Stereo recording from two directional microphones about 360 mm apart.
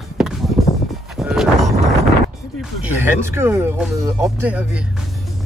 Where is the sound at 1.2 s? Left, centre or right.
Centre.